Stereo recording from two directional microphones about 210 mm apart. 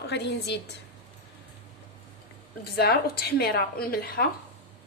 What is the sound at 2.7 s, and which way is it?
A woman's voice, 50° left (ahead or behind).